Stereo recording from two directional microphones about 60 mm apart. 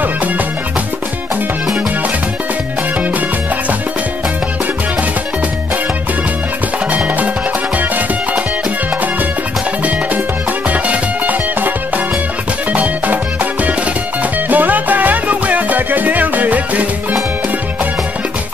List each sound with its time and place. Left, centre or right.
10.7 s music: right
12.7 s music: right